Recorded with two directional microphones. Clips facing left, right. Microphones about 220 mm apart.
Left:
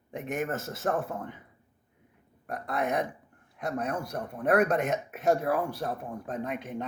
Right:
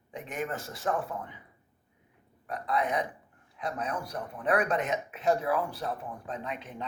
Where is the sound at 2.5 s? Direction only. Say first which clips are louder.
Even; 50° left (ahead or behind).